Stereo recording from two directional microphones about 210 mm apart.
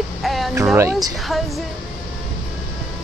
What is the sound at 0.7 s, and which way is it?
Speech, 15° right (ahead or behind).